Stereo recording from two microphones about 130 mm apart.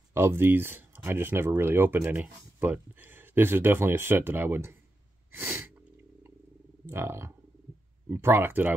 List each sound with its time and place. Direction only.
0.1 s speech: 20° right (ahead or behind)
5.3 s sneeze: 15° right (ahead or behind)
6.9 s speech: 20° right (ahead or behind)